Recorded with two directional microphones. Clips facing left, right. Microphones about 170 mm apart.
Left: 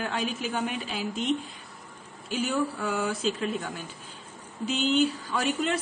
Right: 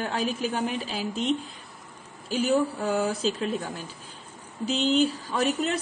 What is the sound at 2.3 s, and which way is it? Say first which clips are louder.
A man's voice: right 4 dB; 35° right (ahead or behind).